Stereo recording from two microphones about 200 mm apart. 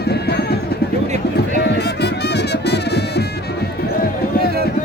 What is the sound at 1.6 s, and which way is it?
Music, 55° left (ahead or behind).